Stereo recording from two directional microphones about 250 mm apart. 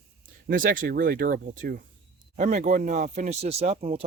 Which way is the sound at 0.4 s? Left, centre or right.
Right.